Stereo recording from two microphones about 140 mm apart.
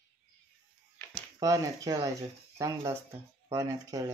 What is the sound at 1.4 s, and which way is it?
Speech, 25° right (ahead or behind).